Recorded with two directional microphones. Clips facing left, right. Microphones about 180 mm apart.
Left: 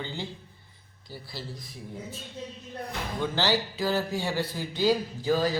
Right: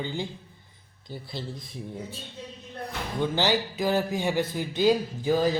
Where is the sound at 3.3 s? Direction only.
15° right (ahead or behind).